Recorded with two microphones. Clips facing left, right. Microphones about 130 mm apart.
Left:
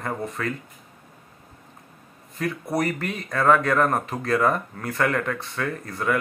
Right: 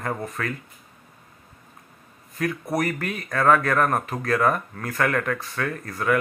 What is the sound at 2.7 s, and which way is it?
Speech, 25° left (ahead or behind).